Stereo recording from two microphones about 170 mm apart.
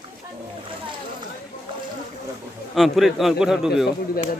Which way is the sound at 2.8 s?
Centre (ahead or behind).